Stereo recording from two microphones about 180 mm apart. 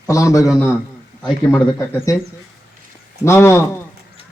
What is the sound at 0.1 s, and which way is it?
A man's voice, 15° left (ahead or behind).